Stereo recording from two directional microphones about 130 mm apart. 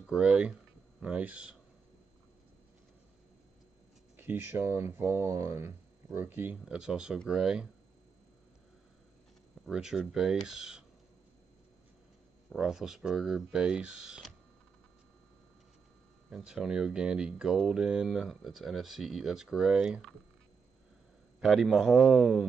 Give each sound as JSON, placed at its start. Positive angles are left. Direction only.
{"t": 0.0, "sound": "speech", "side_deg": -5}
{"t": 4.2, "sound": "speech", "side_deg": -15}
{"t": 9.7, "sound": "speech", "side_deg": -5}
{"t": 12.4, "sound": "speech", "side_deg": -5}
{"t": 16.3, "sound": "speech", "side_deg": -5}
{"t": 21.4, "sound": "speech", "side_deg": 0}